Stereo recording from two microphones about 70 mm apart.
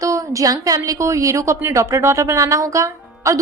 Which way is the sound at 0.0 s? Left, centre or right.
Right.